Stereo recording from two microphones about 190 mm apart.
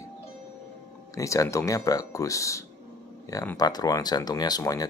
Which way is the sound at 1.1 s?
15° left (ahead or behind).